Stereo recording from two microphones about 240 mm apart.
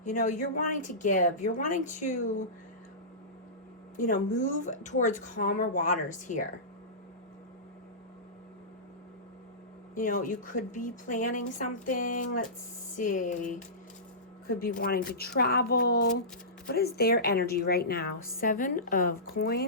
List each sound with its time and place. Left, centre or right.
0.0 s a woman's voice: left
3.9 s a woman's voice: left
9.9 s a woman's voice: left